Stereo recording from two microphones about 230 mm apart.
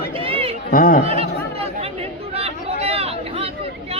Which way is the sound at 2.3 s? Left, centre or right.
Right.